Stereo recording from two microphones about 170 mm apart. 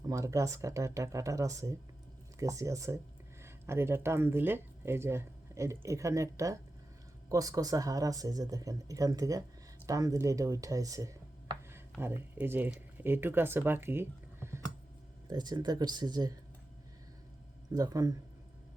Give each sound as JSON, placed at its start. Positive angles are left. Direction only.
{"t": 0.1, "sound": "speech", "side_deg": -20}
{"t": 17.7, "sound": "speech", "side_deg": -20}